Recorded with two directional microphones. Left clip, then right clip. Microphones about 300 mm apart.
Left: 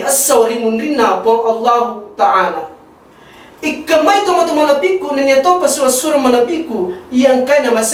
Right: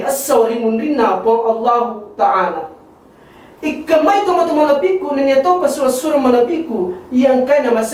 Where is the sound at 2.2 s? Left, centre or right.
Centre.